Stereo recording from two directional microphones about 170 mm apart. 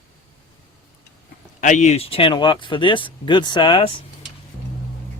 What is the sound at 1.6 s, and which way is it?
Speech, 45° left (ahead or behind).